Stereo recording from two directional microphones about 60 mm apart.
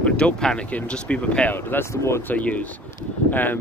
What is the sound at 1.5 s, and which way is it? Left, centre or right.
Speech, left.